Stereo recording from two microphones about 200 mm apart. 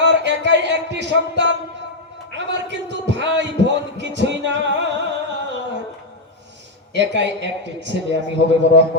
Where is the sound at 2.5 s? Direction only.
60° right (ahead or behind).